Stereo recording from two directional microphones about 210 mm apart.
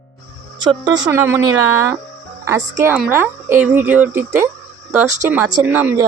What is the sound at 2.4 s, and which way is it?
Speech, 15° right (ahead or behind).